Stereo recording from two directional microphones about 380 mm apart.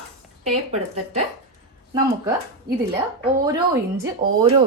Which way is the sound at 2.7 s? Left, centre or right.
Right.